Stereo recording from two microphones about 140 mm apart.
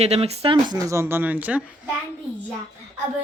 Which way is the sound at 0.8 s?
20° right (ahead or behind).